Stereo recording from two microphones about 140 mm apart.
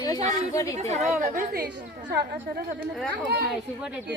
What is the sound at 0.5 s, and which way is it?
Speech, 25° left (ahead or behind).